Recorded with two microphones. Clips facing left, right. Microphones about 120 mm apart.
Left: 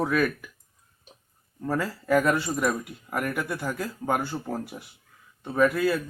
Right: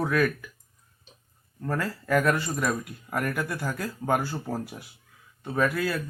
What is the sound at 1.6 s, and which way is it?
Speech, 5° left (ahead or behind).